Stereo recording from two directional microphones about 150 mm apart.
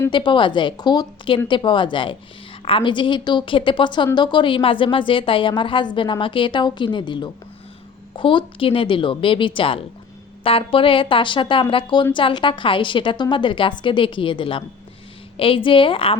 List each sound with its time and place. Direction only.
0.1 s a woman's voice: 30° left (ahead or behind)